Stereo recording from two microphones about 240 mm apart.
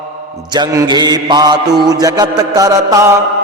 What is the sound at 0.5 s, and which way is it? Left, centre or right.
Mantra, centre.